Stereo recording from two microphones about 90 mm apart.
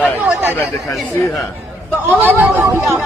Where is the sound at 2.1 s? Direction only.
20° right (ahead or behind).